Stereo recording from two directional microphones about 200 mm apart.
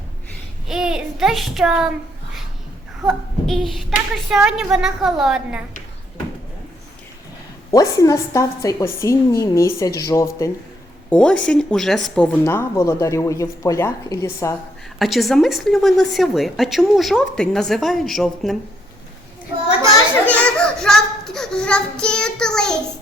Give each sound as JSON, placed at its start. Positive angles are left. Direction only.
{"t": 0.7, "sound": "a woman's voice", "side_deg": -5}
{"t": 3.1, "sound": "a woman's voice", "side_deg": 0}
{"t": 7.7, "sound": "a woman's voice", "side_deg": 15}
{"t": 11.1, "sound": "a woman's voice", "side_deg": 5}
{"t": 14.9, "sound": "a woman's voice", "side_deg": 0}
{"t": 20.2, "sound": "a sound", "side_deg": 5}